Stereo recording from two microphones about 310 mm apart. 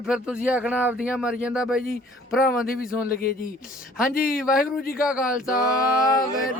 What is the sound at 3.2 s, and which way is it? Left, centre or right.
Speech, left.